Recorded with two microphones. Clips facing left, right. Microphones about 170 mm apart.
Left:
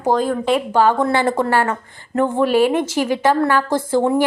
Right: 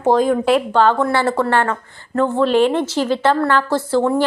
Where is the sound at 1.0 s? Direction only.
20° left (ahead or behind).